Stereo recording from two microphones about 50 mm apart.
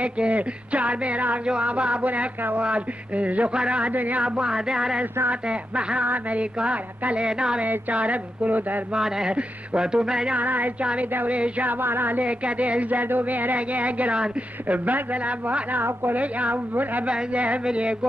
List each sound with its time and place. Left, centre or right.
0.0 s speech: right
4.2 s speech: centre
7.6 s a woman's voice: right
8.9 s speech: centre
10.3 s a woman's voice: right
11.8 s music: right
12.2 s a woman's voice: right
16.2 s speech: right